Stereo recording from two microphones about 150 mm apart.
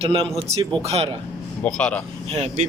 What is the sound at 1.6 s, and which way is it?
Speech, 5° left (ahead or behind).